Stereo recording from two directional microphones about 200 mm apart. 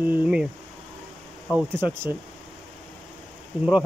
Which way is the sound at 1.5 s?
5° right (ahead or behind).